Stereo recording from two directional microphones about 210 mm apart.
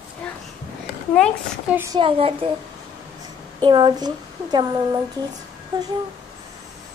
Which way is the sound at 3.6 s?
20° right (ahead or behind).